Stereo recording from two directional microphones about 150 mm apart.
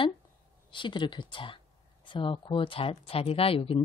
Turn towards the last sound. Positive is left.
turn(degrees=35)  # may be behind; listen again after turning